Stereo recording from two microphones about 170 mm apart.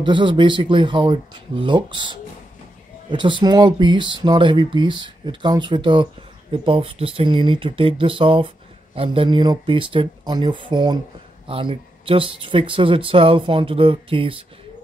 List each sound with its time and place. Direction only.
0.0 s speech: 30° right (ahead or behind)